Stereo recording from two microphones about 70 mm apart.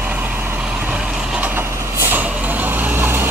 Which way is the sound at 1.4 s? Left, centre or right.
Right.